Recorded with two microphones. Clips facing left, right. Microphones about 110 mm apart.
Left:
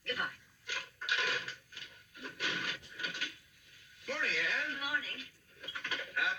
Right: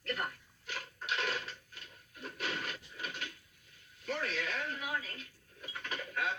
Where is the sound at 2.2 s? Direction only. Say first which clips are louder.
Right 1 dB; centre (ahead or behind).